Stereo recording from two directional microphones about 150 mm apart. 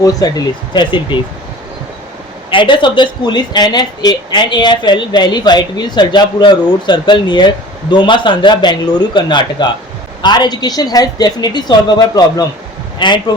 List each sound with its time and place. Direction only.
0.0 s a woman's voice: 25° left (ahead or behind)
2.5 s a woman's voice: 35° left (ahead or behind)